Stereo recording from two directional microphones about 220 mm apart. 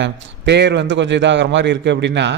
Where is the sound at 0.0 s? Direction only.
50° right (ahead or behind).